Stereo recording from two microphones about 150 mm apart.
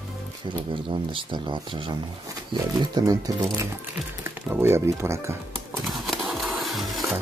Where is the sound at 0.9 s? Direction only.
35° right (ahead or behind); by 5.4 s 20° right (ahead or behind).